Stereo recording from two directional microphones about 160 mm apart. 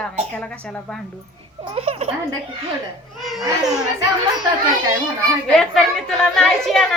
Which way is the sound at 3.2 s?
Centre (ahead or behind).